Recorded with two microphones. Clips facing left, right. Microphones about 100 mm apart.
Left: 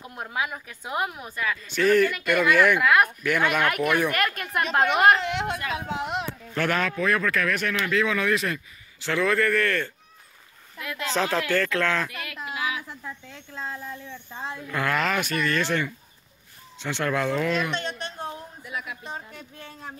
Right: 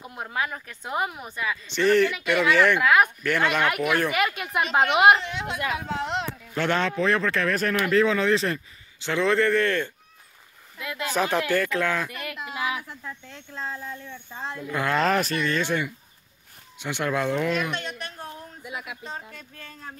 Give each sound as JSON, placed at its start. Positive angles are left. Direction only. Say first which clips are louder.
{"t": 0.0, "sound": "speech", "louder": "even", "side_deg": 0}
{"t": 5.2, "sound": "speech", "louder": "left 5 dB", "side_deg": 70}
{"t": 5.8, "sound": "speech", "louder": "right 1 dB", "side_deg": 15}
{"t": 6.5, "sound": "a man's voice", "louder": "right 1 dB", "side_deg": -25}
{"t": 12.8, "sound": "a woman's voice", "louder": "left 1 dB", "side_deg": 20}
{"t": 13.2, "sound": "speech", "louder": "right 1 dB", "side_deg": 0}
{"t": 14.7, "sound": "a man's voice", "louder": "right 1 dB", "side_deg": -20}
{"t": 15.0, "sound": "speech", "louder": "right 6 dB", "side_deg": -35}
{"t": 15.4, "sound": "speech", "louder": "even", "side_deg": -20}
{"t": 17.7, "sound": "a woman's voice", "louder": "left 2 dB", "side_deg": 30}
{"t": 18.6, "sound": "a man's voice", "louder": "even", "side_deg": -20}
{"t": 19.3, "sound": "a woman's voice", "louder": "left 2 dB", "side_deg": 20}